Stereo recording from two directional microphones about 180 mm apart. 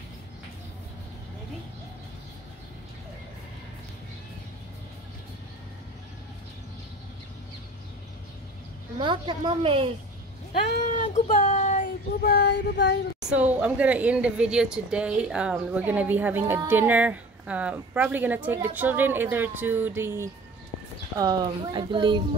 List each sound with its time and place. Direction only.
8.9 s a woman's voice: 25° right (ahead or behind)
10.7 s a sound: 45° left (ahead or behind)
11.2 s child singing: 35° left (ahead or behind); by 12.9 s 70° left (ahead or behind)
13.2 s speech: 5° right (ahead or behind)
21.2 s speech: 25° right (ahead or behind)